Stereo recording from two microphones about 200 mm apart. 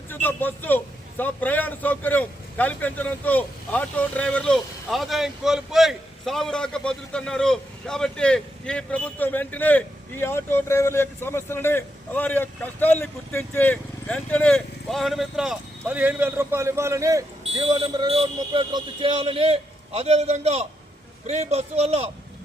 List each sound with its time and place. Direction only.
0.1 s a man's voice: 10° left (ahead or behind); by 17.2 s 15° right (ahead or behind)
17.4 s a man's voice: 25° right (ahead or behind)